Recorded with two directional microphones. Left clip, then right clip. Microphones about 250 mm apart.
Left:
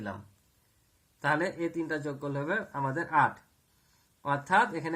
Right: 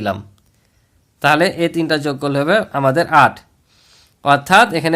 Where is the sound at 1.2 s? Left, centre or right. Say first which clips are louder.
Right 16 dB; right.